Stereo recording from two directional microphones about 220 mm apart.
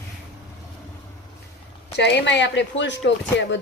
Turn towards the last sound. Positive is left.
turn(degrees=55)  # may be behind; listen again after turning